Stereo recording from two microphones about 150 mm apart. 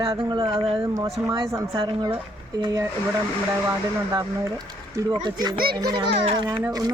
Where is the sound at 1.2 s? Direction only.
10° right (ahead or behind).